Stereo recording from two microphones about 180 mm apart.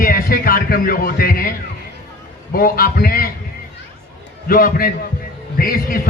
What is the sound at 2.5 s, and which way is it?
Speech, 55° left (ahead or behind).